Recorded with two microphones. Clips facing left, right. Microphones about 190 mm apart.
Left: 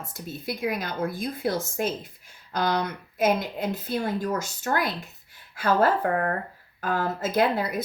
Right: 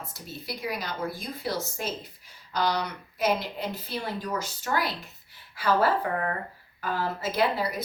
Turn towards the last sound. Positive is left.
turn(degrees=50)  # may be behind; listen again after turning